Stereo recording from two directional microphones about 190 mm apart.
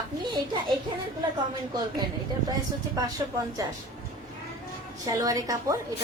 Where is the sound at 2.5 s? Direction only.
20° right (ahead or behind).